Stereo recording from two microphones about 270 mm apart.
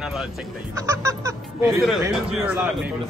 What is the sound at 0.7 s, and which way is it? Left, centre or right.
A man's voice, centre.